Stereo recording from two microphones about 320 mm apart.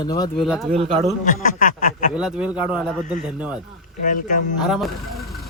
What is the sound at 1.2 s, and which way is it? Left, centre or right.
Speech, left.